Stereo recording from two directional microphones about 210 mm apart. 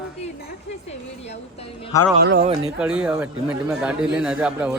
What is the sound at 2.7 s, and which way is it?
A man's voice, 5° right (ahead or behind).